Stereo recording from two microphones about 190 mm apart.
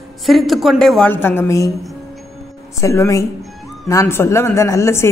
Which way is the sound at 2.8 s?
15° left (ahead or behind).